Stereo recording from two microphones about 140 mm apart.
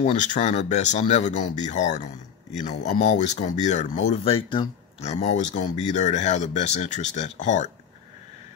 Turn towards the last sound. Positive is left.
turn(degrees=60)  # may be behind; listen again after turning